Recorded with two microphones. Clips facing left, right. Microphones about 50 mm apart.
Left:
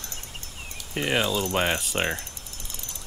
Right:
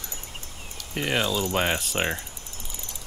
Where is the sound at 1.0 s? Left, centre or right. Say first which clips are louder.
Left 1 dB; centre.